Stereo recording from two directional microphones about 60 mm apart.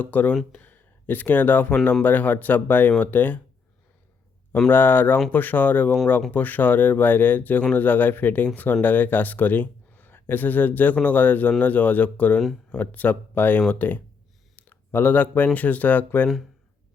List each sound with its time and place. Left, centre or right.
0.0 s speech: left
0.5 s a sound: left
1.8 s speech: left
4.7 s speech: left
14.5 s a sound: left
15.5 s speech: left